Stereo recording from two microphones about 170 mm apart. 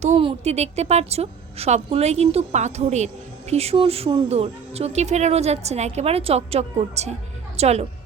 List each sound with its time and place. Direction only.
0.0 s a woman's voice: 35° right (ahead or behind)